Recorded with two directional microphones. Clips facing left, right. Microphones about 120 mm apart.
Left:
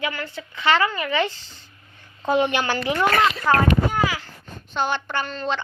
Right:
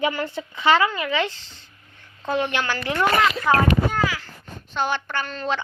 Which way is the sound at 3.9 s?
15° left (ahead or behind).